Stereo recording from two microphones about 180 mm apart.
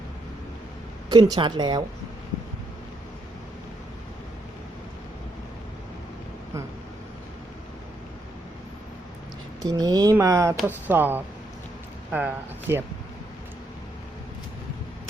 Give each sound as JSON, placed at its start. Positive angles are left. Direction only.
{"t": 1.1, "sound": "speech", "side_deg": -25}
{"t": 9.6, "sound": "speech", "side_deg": -20}